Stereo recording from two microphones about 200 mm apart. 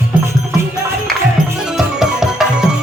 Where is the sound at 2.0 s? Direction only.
5° right (ahead or behind).